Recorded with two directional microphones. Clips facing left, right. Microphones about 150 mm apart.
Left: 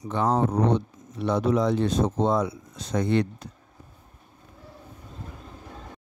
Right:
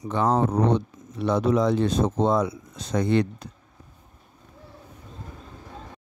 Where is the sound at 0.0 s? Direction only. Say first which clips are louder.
Right 1 dB; 90° right.